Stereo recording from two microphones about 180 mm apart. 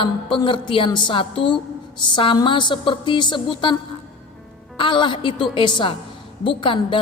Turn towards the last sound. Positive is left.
turn(degrees=30)  # may be behind; listen again after turning